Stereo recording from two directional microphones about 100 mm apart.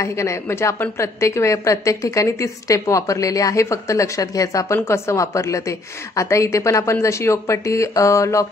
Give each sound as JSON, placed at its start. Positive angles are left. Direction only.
{"t": 0.0, "sound": "a woman's voice", "side_deg": 30}